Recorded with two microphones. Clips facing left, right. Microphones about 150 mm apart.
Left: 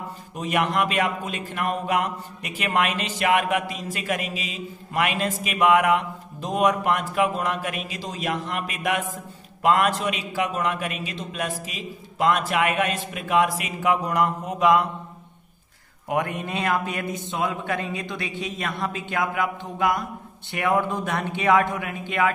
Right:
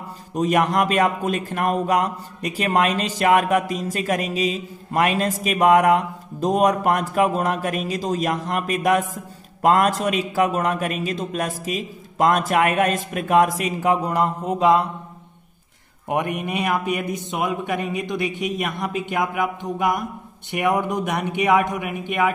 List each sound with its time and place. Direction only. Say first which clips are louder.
0.3 s a man's voice: right 5 dB; 40° right (ahead or behind)
16.1 s a man's voice: right 2 dB; 20° right (ahead or behind)